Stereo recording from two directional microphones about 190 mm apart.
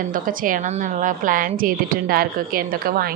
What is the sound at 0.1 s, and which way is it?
A woman's voice, 45° right (ahead or behind).